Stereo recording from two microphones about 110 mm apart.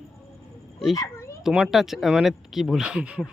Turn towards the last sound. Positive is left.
turn(degrees=-10)  # may be behind; listen again after turning